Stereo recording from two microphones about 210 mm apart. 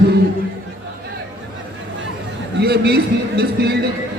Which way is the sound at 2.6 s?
50° right (ahead or behind).